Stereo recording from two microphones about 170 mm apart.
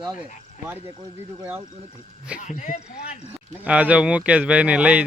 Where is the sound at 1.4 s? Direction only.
10° right (ahead or behind).